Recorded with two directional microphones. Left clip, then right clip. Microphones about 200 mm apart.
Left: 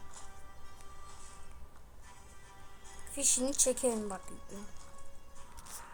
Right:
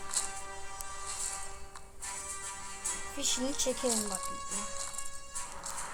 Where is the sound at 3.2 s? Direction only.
10° left (ahead or behind).